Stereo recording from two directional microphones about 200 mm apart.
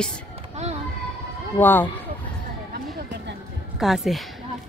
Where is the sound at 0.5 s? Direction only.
35° right (ahead or behind).